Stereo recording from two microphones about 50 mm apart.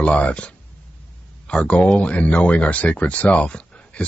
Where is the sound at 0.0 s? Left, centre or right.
Left.